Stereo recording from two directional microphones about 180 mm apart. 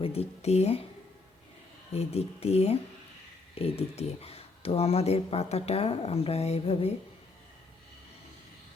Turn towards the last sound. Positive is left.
turn(degrees=35)  # may be behind; listen again after turning